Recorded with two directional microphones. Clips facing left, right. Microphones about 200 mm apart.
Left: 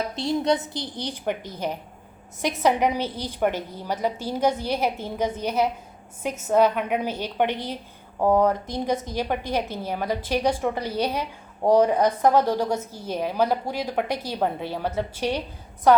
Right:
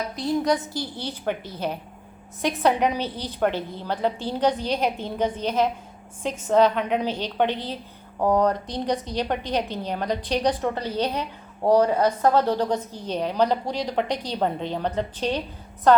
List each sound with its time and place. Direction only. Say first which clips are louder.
0.4 s a woman's voice: even; 20° left (ahead or behind)